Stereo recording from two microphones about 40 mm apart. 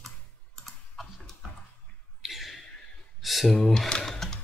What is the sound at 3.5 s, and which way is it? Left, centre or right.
Speech, centre.